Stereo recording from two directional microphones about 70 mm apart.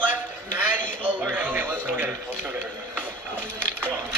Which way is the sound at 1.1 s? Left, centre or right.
Right.